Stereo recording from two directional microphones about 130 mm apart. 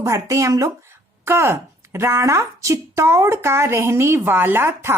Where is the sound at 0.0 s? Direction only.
25° right (ahead or behind).